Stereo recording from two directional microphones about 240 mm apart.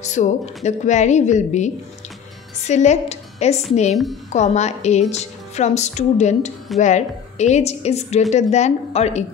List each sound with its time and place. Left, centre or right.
0.0 s a woman's voice: left